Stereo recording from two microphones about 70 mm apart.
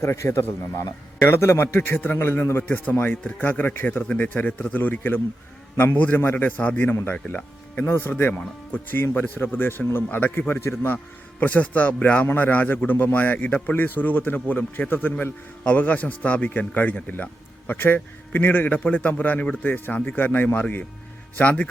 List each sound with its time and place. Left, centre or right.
0.0 s a man's voice: left; by 21.7 s centre